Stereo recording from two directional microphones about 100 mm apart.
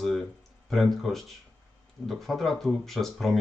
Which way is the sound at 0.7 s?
Centre (ahead or behind).